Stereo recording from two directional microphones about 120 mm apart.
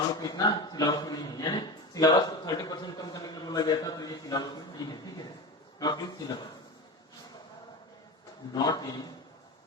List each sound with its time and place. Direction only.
0.2 s a man's voice: 35° left (ahead or behind)
8.5 s a man's voice: 30° left (ahead or behind)